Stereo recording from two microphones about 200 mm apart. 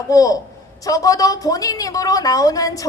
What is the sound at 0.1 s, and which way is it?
A woman's voice, 15° left (ahead or behind).